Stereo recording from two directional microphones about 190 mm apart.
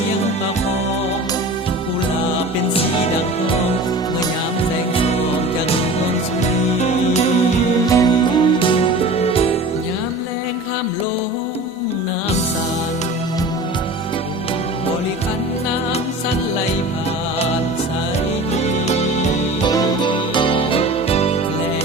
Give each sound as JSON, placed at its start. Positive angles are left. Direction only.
{"t": 6.5, "sound": "music", "side_deg": 35}
{"t": 7.9, "sound": "music", "side_deg": 20}
{"t": 18.5, "sound": "music", "side_deg": 35}
{"t": 19.6, "sound": "music", "side_deg": 20}